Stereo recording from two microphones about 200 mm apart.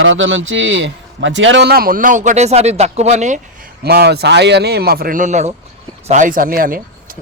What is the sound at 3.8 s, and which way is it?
Speech, 50° right (ahead or behind).